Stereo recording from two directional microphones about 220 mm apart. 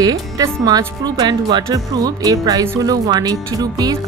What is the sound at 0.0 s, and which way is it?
Speech, 15° right (ahead or behind).